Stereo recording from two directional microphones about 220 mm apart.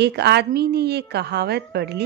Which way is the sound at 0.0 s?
50° right (ahead or behind).